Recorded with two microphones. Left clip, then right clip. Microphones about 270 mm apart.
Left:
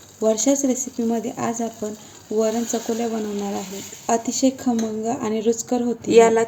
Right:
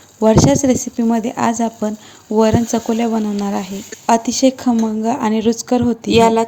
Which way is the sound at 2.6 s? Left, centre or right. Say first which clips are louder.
Right 6 dB; centre.